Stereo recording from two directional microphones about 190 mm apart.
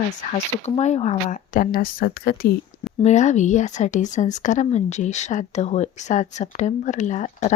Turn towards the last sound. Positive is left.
turn(degrees=40)  # may be behind; listen again after turning